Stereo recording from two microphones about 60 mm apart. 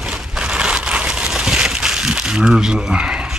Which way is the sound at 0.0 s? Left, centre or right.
Centre.